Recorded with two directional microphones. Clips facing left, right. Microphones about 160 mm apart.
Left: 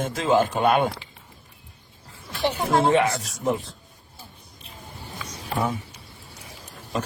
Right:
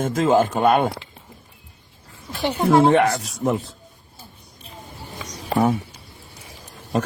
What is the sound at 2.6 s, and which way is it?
Speech, 55° right (ahead or behind).